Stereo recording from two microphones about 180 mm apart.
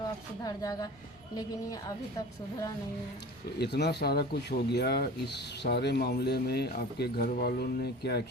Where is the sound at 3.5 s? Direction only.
65° left (ahead or behind).